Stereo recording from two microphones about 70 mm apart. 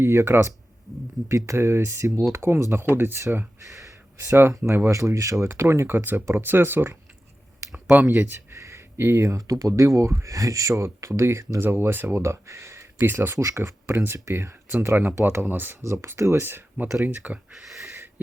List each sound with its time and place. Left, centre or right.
0.0 s speech: right
4.3 s speech: right
8.5 s speech: right
12.1 s speech: right
13.1 s speech: right
15.8 s speech: right
17.1 s speech: right
17.5 s a sound: centre
17.8 s wheeze: right